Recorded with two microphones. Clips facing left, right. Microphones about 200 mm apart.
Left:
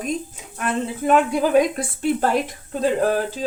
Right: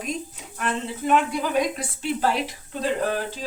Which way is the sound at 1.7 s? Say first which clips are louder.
Left 6 dB; 50° left (ahead or behind).